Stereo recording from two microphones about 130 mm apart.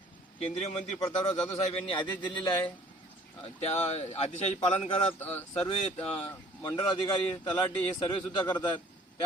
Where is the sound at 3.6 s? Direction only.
55° left (ahead or behind).